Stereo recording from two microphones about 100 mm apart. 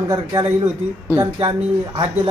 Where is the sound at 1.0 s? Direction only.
25° right (ahead or behind).